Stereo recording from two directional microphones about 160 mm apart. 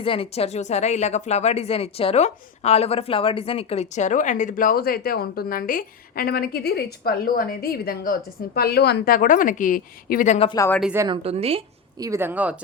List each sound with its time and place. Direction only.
0.0 s speech: 35° left (ahead or behind)
11.1 s a woman's voice: 40° right (ahead or behind)
11.9 s speech: 20° right (ahead or behind)